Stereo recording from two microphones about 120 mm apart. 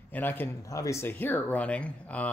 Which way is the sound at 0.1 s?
15° left (ahead or behind).